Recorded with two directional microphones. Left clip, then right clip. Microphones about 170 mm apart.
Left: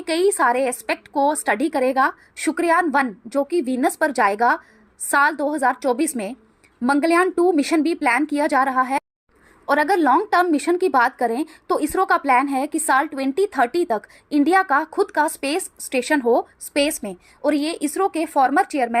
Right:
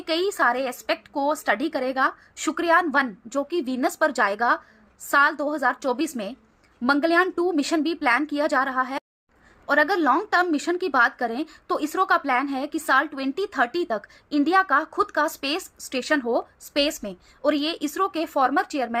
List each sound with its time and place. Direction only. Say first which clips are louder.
0.0 s a woman's voice: left 4 dB; 15° left (ahead or behind)